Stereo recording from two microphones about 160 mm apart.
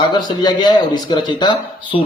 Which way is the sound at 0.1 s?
25° left (ahead or behind).